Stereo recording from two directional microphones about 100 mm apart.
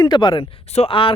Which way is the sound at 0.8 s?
65° left (ahead or behind).